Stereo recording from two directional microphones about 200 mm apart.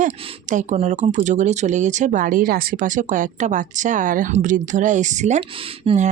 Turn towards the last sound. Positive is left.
turn(degrees=-25)  # may be behind; listen again after turning